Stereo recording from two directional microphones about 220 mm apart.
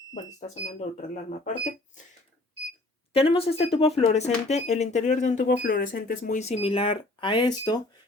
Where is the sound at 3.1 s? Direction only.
25° left (ahead or behind).